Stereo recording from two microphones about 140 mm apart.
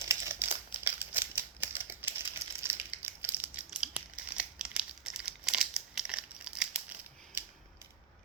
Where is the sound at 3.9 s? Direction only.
10° right (ahead or behind).